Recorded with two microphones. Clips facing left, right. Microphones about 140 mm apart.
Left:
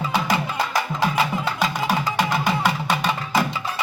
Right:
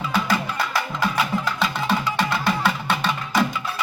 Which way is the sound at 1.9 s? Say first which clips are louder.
Left 1 dB; 15° left (ahead or behind).